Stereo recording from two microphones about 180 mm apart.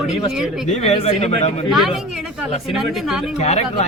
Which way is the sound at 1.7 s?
Centre (ahead or behind).